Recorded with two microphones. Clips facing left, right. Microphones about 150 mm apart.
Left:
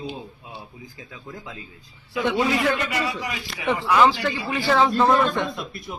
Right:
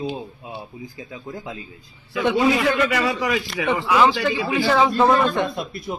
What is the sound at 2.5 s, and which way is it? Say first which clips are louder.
A man's voice: right 3 dB; 90° right.